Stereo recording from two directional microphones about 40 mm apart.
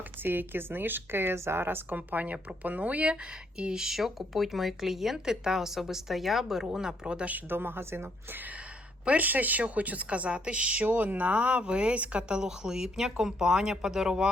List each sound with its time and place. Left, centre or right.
0.2 s speech: right
2.0 s a woman's voice: right
3.6 s speech: centre
7.5 s a woman's voice: right
9.0 s a woman's voice: right
10.8 s a woman's voice: right
12.4 s speech: centre